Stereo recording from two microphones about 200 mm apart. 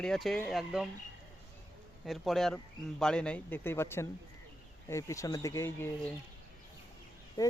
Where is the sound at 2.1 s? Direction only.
Centre (ahead or behind).